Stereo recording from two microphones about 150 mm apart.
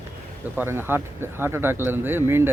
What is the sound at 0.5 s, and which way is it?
Speech, 15° right (ahead or behind).